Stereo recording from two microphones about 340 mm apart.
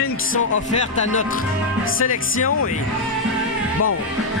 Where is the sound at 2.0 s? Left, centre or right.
Left.